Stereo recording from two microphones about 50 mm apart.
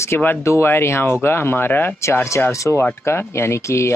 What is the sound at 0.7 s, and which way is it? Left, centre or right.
Speech, left.